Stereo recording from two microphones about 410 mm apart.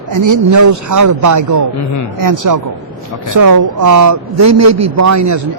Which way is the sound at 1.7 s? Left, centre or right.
Left.